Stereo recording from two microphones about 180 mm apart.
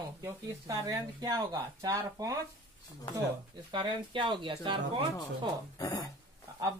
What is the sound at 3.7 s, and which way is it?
Speech, 25° right (ahead or behind).